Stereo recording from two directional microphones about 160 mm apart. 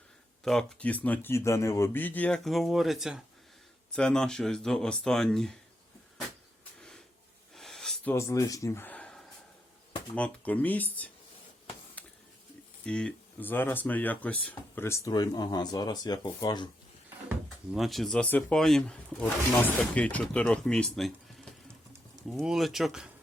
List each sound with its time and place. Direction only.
0.4 s speech: 5° left (ahead or behind)
7.5 s a sound: centre (ahead or behind)
8.1 s speech: 15° left (ahead or behind)
12.0 s a sound: 10° left (ahead or behind)
12.8 s speech: 5° left (ahead or behind); by 16.6 s 25° left (ahead or behind)
17.7 s speech: centre (ahead or behind)